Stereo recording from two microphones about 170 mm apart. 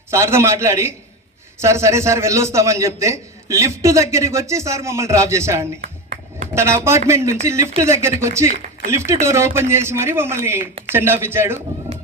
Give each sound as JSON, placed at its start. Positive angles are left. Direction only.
{"t": 0.1, "sound": "a man's voice", "side_deg": -15}
{"t": 5.8, "sound": "a sound", "side_deg": -40}
{"t": 6.5, "sound": "a man's voice", "side_deg": -15}
{"t": 11.9, "sound": "run", "side_deg": -40}